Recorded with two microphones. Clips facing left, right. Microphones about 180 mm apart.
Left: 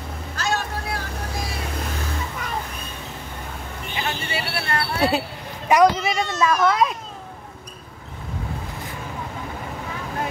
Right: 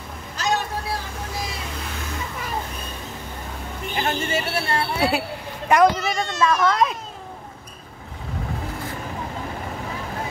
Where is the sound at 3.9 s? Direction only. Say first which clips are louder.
Right 4 dB; 45° right (ahead or behind).